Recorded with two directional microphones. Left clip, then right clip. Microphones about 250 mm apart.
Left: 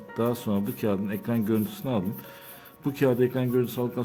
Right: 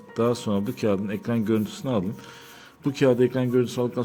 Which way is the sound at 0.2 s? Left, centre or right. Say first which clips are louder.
Right 4 dB; centre.